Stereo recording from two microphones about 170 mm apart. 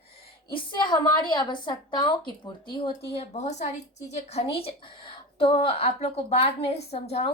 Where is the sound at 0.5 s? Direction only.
25° left (ahead or behind).